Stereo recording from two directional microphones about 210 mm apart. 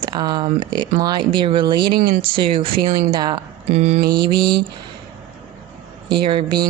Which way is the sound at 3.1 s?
20° right (ahead or behind).